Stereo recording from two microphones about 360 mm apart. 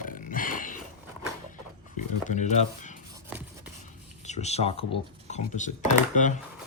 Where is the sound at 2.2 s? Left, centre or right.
Centre.